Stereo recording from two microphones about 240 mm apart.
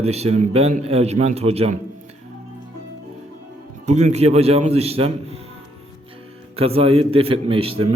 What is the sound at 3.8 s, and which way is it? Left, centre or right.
A man's voice, right.